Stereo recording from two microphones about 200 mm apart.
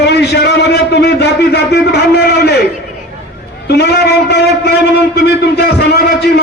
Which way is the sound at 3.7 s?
55° left (ahead or behind).